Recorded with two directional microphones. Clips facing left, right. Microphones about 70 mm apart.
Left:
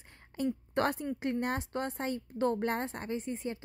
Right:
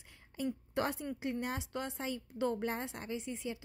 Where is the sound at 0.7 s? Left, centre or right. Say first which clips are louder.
Left 5 dB; left.